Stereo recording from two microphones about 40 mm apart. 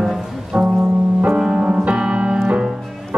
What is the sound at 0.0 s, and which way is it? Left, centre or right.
Music, centre.